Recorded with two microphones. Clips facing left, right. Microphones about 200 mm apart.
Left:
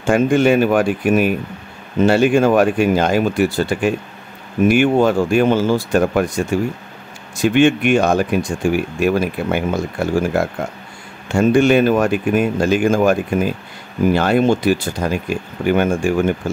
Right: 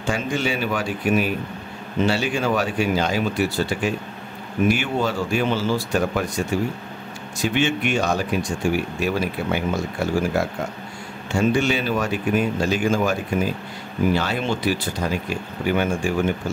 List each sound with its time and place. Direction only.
0.0 s speech: 55° left (ahead or behind)
7.4 s speech: 55° left (ahead or behind)